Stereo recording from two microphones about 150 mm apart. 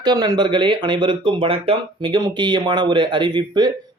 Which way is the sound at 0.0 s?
30° right (ahead or behind).